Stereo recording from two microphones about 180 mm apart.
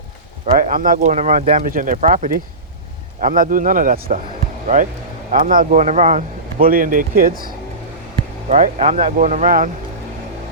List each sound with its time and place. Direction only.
0.5 s speech: 50° right (ahead or behind)
5.3 s speech: 50° right (ahead or behind)
8.4 s speech: 40° right (ahead or behind)